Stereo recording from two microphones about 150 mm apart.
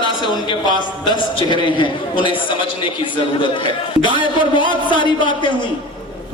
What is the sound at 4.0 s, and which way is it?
A man's voice, 30° left (ahead or behind).